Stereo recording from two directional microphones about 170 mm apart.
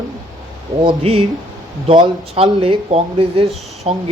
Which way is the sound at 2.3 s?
35° right (ahead or behind).